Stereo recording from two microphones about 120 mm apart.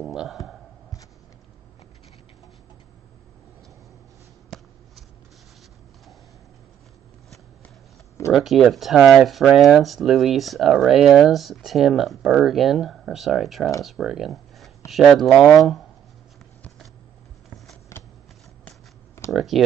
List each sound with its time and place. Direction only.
0.0 s a sound: centre (ahead or behind)
8.3 s speech: 5° right (ahead or behind)
17.9 s shuffling cards: 25° left (ahead or behind)
19.3 s speech: centre (ahead or behind)